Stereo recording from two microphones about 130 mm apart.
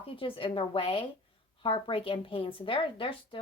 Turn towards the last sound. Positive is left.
turn(degrees=40)  # may be behind; listen again after turning